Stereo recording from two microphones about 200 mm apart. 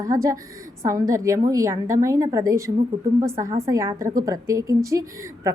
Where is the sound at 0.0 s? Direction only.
15° right (ahead or behind).